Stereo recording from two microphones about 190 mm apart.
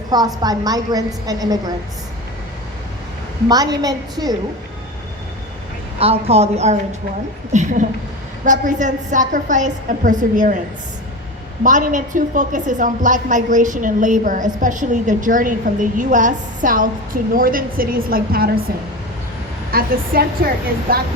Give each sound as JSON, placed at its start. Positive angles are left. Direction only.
{"t": 0.1, "sound": "a woman's voice", "side_deg": -20}
{"t": 3.5, "sound": "a woman's voice", "side_deg": -20}
{"t": 6.0, "sound": "a woman's voice", "side_deg": -30}
{"t": 11.6, "sound": "a woman's voice", "side_deg": -45}
{"t": 19.7, "sound": "a woman's voice", "side_deg": -50}